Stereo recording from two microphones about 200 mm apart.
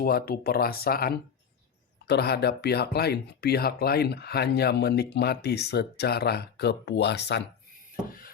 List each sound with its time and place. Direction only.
0.0 s speech: 50° left (ahead or behind)